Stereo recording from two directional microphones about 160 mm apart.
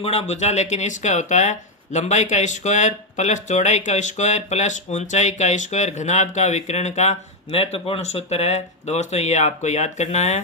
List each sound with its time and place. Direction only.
0.0 s speech: 40° left (ahead or behind)